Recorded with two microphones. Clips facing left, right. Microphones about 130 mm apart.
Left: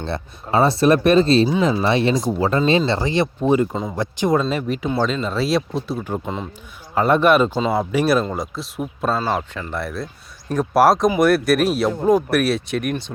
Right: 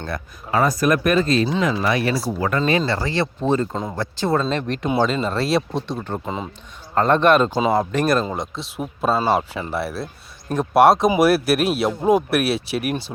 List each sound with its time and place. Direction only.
0.0 s speech: 30° left (ahead or behind)
4.4 s speech: 5° left (ahead or behind)
6.9 s speech: 5° left (ahead or behind)